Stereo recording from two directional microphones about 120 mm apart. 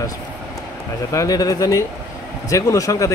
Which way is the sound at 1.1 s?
30° left (ahead or behind).